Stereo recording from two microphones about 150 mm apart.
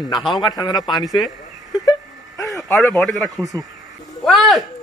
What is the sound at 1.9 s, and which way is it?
Wail, 20° left (ahead or behind).